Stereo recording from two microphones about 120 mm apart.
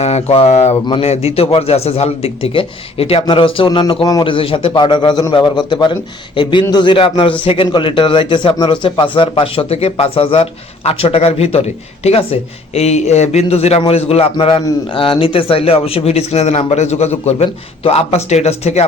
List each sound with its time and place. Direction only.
0.0 s a man's voice: 65° left (ahead or behind)